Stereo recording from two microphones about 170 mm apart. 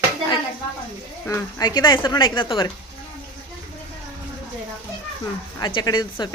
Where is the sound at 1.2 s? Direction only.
25° left (ahead or behind).